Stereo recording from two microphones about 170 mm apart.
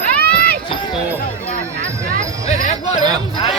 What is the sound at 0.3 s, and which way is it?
Run, 5° left (ahead or behind).